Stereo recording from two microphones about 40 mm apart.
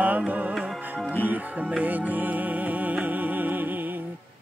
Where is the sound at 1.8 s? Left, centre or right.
Right.